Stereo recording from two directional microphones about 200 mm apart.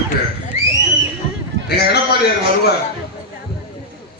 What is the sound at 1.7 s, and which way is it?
A man's voice, 55° left (ahead or behind).